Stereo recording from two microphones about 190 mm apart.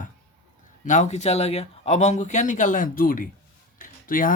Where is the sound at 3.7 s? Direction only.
45° left (ahead or behind).